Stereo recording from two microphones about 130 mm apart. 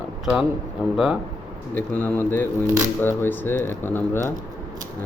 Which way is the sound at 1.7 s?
15° left (ahead or behind).